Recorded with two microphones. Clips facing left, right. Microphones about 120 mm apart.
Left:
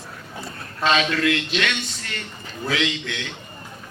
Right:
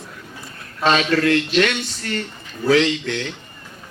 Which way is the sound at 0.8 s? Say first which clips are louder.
Right 3 dB; 35° right (ahead or behind).